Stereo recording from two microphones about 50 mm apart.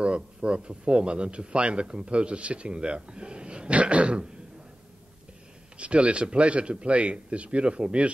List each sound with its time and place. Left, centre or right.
0.0 s speech: right
5.8 s speech: right